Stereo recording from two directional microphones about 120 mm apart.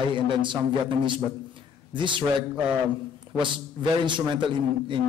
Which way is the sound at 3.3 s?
40° right (ahead or behind).